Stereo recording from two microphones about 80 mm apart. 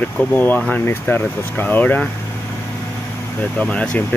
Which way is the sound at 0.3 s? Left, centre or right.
Left.